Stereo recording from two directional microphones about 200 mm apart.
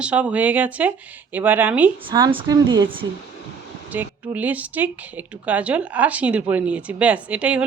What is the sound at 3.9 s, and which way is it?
Speech, 10° right (ahead or behind).